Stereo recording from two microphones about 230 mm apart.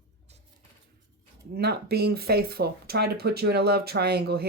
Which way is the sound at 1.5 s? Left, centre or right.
Right.